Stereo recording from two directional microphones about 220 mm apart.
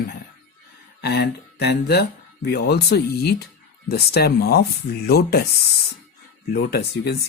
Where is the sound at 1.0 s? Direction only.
50° left (ahead or behind).